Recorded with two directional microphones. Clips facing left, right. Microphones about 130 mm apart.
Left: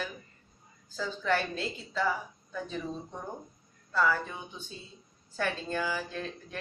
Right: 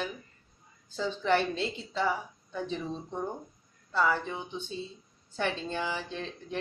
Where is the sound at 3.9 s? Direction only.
20° right (ahead or behind).